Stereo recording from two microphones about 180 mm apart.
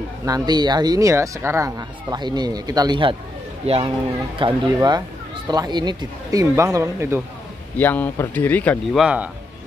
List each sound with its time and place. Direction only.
0.2 s speech: 20° right (ahead or behind)
4.5 s speech: 20° right (ahead or behind)
7.7 s speech: 10° left (ahead or behind)
9.0 s speech: 5° right (ahead or behind)